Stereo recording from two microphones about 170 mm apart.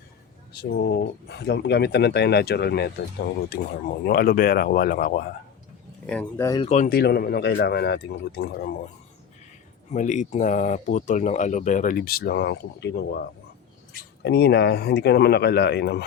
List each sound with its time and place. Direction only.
0.5 s speech: 70° left (ahead or behind)
4.0 s speech: 60° left (ahead or behind)
6.1 s speech: 10° left (ahead or behind)
6.7 s speech: 60° left (ahead or behind)
9.9 s speech: 45° left (ahead or behind); by 16.0 s 70° left (ahead or behind)